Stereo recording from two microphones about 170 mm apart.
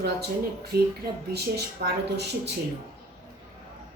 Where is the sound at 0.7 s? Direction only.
70° right (ahead or behind).